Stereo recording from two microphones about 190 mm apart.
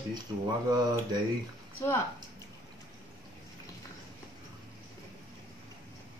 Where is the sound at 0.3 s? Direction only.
20° right (ahead or behind).